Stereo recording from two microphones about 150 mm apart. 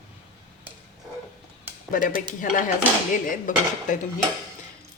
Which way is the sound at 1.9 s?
60° left (ahead or behind).